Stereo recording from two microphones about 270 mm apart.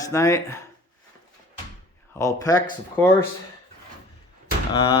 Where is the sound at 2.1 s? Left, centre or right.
Centre.